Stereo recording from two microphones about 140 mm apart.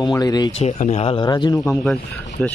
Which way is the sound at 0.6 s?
50° left (ahead or behind).